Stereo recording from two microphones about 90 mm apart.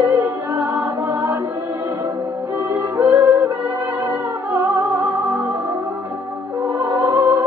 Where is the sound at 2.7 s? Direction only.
35° right (ahead or behind).